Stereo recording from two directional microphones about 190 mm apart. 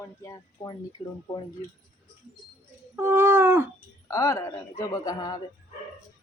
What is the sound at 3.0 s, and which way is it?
Cat, 15° right (ahead or behind).